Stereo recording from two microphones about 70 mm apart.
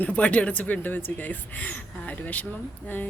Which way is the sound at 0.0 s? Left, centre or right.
Left.